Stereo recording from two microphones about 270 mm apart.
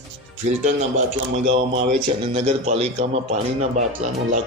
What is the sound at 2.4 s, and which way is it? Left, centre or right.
Speech, right.